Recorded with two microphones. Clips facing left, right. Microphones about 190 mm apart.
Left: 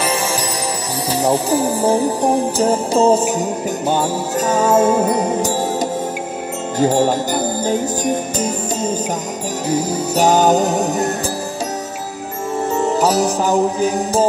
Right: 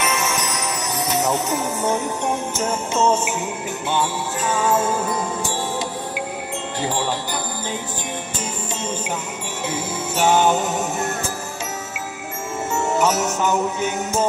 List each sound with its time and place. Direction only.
0.0 s music: 30° left (ahead or behind)
1.2 s speech: 30° left (ahead or behind)
6.8 s music: 45° left (ahead or behind)
9.7 s speech: 40° left (ahead or behind)
12.7 s music: 35° left (ahead or behind)